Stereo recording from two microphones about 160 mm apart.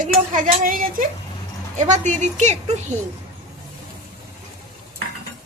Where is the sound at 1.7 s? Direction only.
50° right (ahead or behind).